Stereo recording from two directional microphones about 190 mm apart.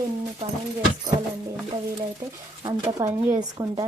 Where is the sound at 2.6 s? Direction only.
15° right (ahead or behind).